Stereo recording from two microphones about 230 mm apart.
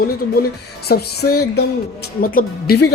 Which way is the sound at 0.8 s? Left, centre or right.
Left.